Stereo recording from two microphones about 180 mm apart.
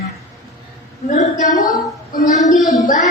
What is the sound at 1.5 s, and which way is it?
Speech, 20° left (ahead or behind).